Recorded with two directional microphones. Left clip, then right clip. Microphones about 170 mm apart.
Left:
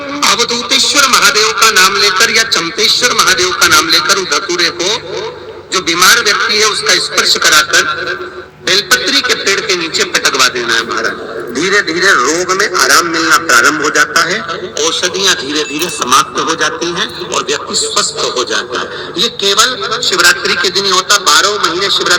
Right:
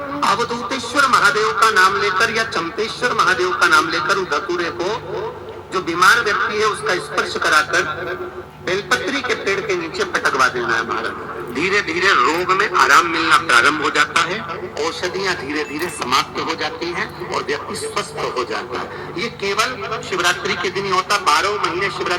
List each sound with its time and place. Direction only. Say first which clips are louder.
0.2 s speech: left 7 dB; 25° left (ahead or behind)
17.3 s speech: left 8 dB; 25° left (ahead or behind)